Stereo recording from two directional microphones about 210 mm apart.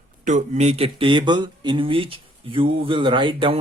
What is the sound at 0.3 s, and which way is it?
Speech, 35° right (ahead or behind).